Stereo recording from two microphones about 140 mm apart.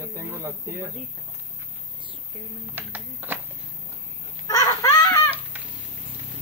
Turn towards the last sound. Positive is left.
turn(degrees=25)  # may be behind; listen again after turning